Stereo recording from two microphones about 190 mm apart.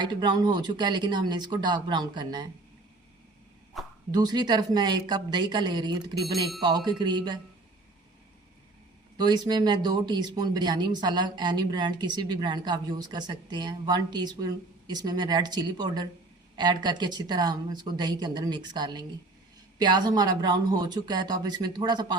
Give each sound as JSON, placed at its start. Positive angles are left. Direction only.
{"t": 0.0, "sound": "speech", "side_deg": -25}
{"t": 3.8, "sound": "a sound", "side_deg": 0}
{"t": 4.1, "sound": "speech", "side_deg": -20}
{"t": 6.1, "sound": "speech", "side_deg": 0}
{"t": 6.6, "sound": "speech", "side_deg": -25}
{"t": 9.1, "sound": "speech", "side_deg": -20}